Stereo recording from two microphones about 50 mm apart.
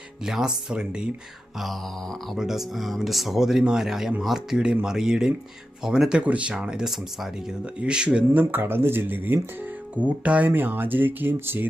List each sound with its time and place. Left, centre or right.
0.3 s speech: centre
1.5 s speech: centre
4.5 s speech: centre
6.2 s speech: right
6.8 s speech: centre
7.6 s speech: centre
8.3 s speech: right
9.9 s speech: right
10.5 s speech: right